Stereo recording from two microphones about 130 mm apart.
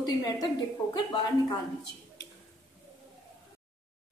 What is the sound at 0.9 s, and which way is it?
Speech, 30° left (ahead or behind).